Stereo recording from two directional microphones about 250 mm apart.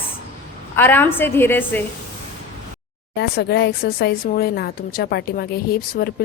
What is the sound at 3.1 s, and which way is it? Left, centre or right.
Speech, left.